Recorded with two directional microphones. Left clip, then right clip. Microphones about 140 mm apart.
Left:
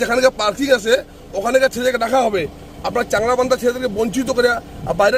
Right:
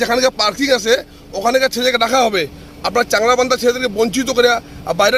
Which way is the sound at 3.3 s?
15° right (ahead or behind).